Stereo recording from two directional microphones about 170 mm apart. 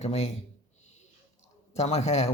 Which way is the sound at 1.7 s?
40° left (ahead or behind).